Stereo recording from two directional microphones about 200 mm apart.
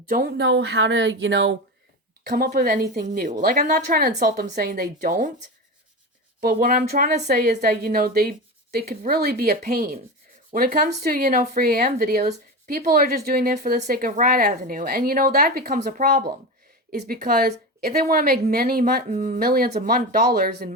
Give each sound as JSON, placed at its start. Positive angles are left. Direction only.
{"t": 0.1, "sound": "speech", "side_deg": -50}
{"t": 2.2, "sound": "a woman's voice", "side_deg": -50}
{"t": 6.4, "sound": "a woman's voice", "side_deg": -45}